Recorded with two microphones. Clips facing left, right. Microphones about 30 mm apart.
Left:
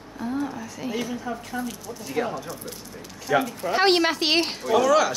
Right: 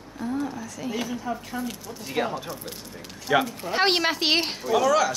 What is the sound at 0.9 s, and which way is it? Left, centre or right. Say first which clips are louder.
Speech: even; centre.